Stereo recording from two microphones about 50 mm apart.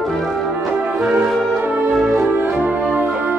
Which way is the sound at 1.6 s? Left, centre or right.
Right.